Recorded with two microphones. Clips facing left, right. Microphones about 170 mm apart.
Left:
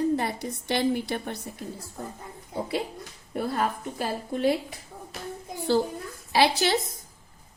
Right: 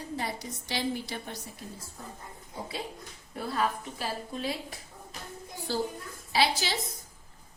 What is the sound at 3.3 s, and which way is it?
A woman's voice, 55° left (ahead or behind).